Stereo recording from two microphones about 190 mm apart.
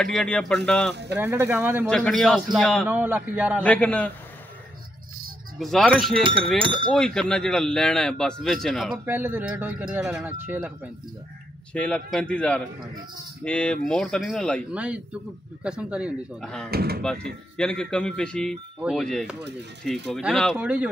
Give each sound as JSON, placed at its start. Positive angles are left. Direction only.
{"t": 0.0, "sound": "speech", "side_deg": 5}
{"t": 1.1, "sound": "a man's voice", "side_deg": -10}
{"t": 1.9, "sound": "a man's voice", "side_deg": 5}
{"t": 3.6, "sound": "a man's voice", "side_deg": 5}
{"t": 5.6, "sound": "speech", "side_deg": 0}
{"t": 6.2, "sound": "speech", "side_deg": -25}
{"t": 7.2, "sound": "speech", "side_deg": 5}
{"t": 9.0, "sound": "a man's voice", "side_deg": -10}
{"t": 11.7, "sound": "a man's voice", "side_deg": 5}
{"t": 16.7, "sound": "speech", "side_deg": -55}
{"t": 17.0, "sound": "a man's voice", "side_deg": 5}